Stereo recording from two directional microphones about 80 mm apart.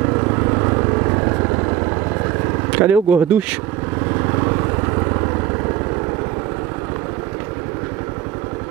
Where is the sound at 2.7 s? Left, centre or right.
Centre.